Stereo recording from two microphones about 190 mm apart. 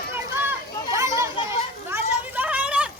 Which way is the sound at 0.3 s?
15° right (ahead or behind).